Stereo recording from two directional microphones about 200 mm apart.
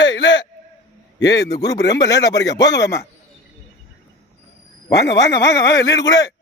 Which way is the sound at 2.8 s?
15° left (ahead or behind).